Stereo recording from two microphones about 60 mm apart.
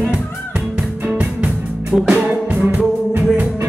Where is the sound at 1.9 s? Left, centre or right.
Centre.